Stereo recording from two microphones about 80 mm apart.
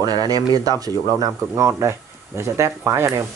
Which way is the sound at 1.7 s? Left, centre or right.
Right.